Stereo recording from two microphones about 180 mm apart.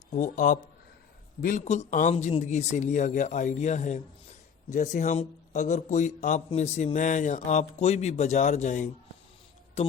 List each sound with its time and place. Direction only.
0.1 s a man's voice: 45° left (ahead or behind)